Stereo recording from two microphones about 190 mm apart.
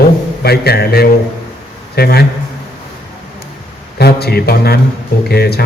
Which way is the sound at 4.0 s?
55° left (ahead or behind).